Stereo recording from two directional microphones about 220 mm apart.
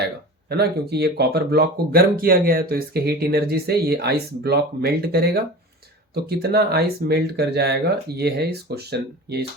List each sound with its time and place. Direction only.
0.5 s speech: 45° right (ahead or behind)